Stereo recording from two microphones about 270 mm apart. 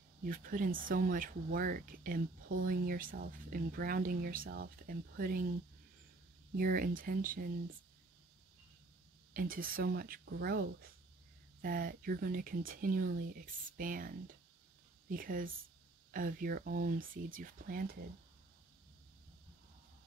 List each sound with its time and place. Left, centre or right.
0.2 s speech: right
6.5 s speech: right
9.3 s speech: right